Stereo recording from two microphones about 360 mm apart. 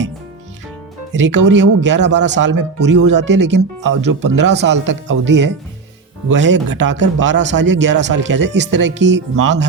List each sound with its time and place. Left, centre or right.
1.1 s speech: right